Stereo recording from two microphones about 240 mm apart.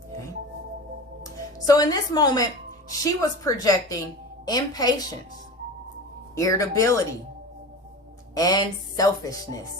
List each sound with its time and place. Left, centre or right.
1.2 s speech: centre
6.3 s speech: centre
8.4 s speech: centre